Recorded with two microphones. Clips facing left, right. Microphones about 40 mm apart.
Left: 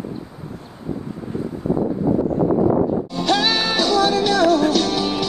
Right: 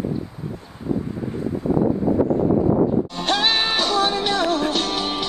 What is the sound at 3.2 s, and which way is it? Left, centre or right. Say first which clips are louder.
Music: left 4 dB; right.